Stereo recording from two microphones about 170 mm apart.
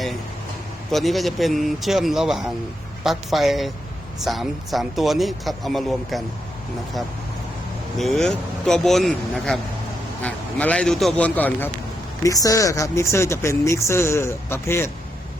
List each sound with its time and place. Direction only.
0.9 s speech: centre (ahead or behind)
7.9 s speech: centre (ahead or behind)
12.2 s speech: 20° left (ahead or behind)